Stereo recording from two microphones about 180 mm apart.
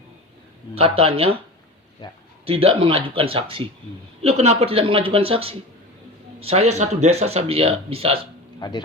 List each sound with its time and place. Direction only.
0.8 s speech: 30° right (ahead or behind)
2.0 s speech: 25° left (ahead or behind)
2.5 s speech: 30° right (ahead or behind)
8.6 s speech: 25° left (ahead or behind)